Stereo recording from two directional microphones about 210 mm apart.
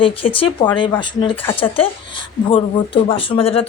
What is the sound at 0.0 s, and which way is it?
Speech, 25° left (ahead or behind).